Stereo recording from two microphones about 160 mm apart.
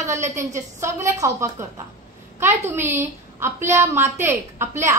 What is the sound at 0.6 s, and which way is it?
Speech, 15° right (ahead or behind).